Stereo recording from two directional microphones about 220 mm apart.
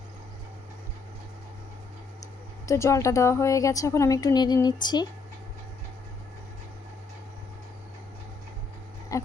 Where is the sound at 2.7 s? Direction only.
15° left (ahead or behind).